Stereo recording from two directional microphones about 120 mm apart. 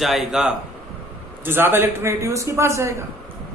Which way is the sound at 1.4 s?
20° right (ahead or behind).